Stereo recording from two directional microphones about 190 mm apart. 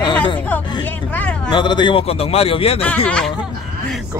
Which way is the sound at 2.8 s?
5° left (ahead or behind).